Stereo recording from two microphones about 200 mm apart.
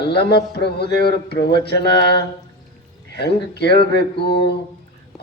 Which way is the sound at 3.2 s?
55° left (ahead or behind).